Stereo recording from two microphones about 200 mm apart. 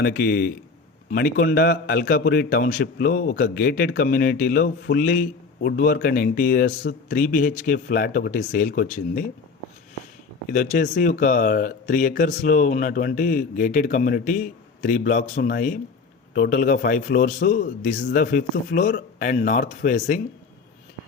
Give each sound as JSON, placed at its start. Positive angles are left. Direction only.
{"t": 0.0, "sound": "speech", "side_deg": 50}
{"t": 10.5, "sound": "speech", "side_deg": 40}